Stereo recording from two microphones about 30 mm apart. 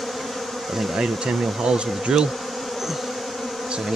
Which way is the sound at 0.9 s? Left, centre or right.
Right.